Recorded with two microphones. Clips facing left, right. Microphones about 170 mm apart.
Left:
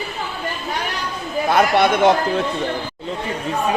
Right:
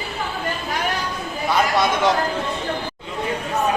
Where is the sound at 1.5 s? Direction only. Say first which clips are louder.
Left 4 dB; 60° left (ahead or behind).